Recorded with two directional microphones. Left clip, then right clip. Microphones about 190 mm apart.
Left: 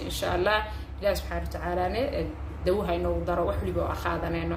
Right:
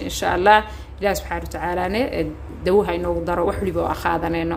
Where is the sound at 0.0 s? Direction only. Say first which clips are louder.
Right 9 dB; 40° right (ahead or behind).